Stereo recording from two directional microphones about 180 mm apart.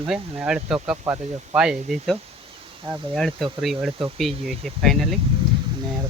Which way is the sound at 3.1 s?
Centre (ahead or behind).